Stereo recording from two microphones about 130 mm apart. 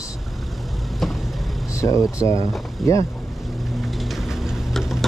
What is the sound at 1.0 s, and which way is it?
Vehicle, centre (ahead or behind).